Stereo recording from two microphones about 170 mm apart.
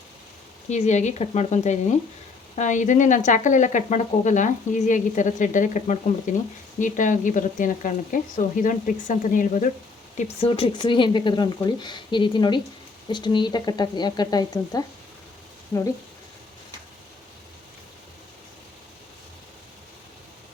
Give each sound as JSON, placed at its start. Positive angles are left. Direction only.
{"t": 0.7, "sound": "speech", "side_deg": 40}
{"t": 10.2, "sound": "speech", "side_deg": 35}